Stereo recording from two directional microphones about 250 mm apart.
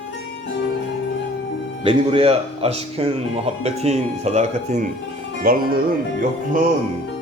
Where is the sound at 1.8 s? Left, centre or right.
Right.